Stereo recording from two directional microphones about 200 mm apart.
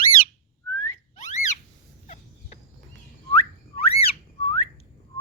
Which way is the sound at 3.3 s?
30° left (ahead or behind).